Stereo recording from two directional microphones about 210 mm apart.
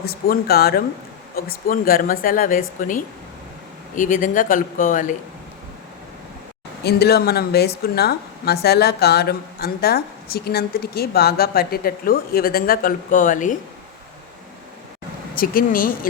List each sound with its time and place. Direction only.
0.0 s a woman's voice: 45° left (ahead or behind)
6.8 s a woman's voice: 50° left (ahead or behind)
15.4 s a woman's voice: 40° left (ahead or behind)